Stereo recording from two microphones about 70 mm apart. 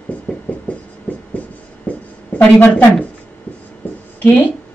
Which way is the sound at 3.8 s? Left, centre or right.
Left.